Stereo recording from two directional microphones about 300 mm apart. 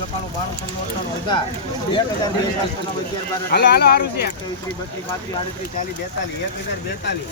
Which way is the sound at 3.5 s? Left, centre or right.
Left.